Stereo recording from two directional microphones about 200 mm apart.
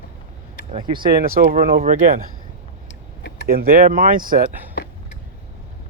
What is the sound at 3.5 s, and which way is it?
Speech, 45° right (ahead or behind).